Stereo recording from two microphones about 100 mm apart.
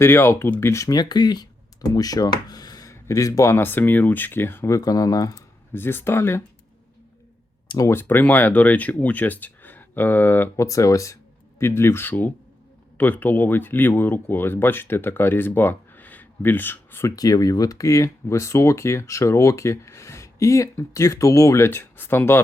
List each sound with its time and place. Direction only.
0.0 s speech: 25° left (ahead or behind)
0.9 s speech: 45° left (ahead or behind)
5.7 s speech: 20° left (ahead or behind)
7.9 s speech: 20° left (ahead or behind)
10.7 s speech: 35° left (ahead or behind)
17.2 s speech: 35° left (ahead or behind); by 22.4 s 20° left (ahead or behind)